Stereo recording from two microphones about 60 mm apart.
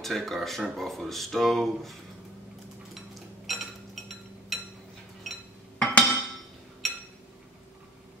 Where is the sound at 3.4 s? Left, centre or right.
Centre.